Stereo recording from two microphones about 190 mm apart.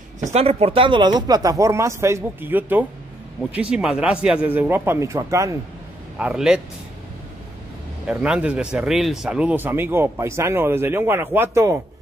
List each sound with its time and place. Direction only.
0.3 s a man's voice: 35° right (ahead or behind); by 5.6 s 15° right (ahead or behind)
6.1 s a man's voice: 5° right (ahead or behind)
8.1 s a man's voice: 5° right (ahead or behind)